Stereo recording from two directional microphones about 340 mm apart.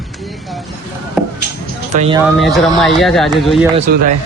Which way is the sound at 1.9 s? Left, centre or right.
Centre.